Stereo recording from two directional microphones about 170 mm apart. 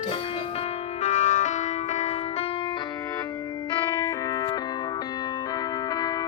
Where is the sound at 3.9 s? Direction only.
15° left (ahead or behind).